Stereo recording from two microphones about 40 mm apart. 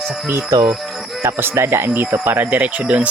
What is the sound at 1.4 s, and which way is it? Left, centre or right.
Speech, right.